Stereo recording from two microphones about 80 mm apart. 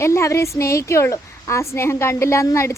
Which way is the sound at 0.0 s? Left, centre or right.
Left.